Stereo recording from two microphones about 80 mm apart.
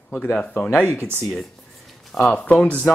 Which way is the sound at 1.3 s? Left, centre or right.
Centre.